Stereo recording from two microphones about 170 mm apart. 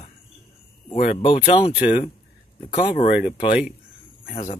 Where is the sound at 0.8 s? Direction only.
40° left (ahead or behind).